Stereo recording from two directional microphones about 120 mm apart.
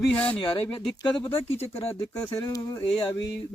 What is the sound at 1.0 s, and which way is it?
Speech, 20° left (ahead or behind).